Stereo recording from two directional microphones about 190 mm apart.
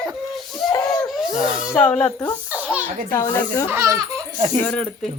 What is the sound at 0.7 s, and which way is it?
Laughter, 20° left (ahead or behind).